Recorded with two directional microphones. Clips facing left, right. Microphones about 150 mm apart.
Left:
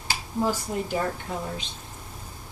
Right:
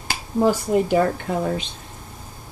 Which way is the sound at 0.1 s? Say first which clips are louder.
Right 7 dB; 65° right (ahead or behind).